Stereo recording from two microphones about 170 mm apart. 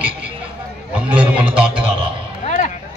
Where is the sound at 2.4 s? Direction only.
45° left (ahead or behind).